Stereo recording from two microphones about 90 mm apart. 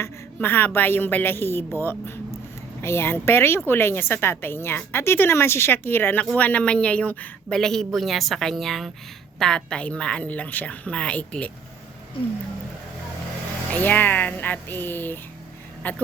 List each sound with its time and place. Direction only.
0.3 s a woman's voice: 20° left (ahead or behind)
7.5 s a woman's voice: 5° left (ahead or behind)
13.7 s a woman's voice: 20° left (ahead or behind)